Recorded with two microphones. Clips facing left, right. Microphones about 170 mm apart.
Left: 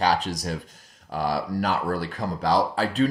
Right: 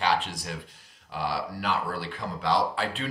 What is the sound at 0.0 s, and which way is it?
Speech, 40° left (ahead or behind).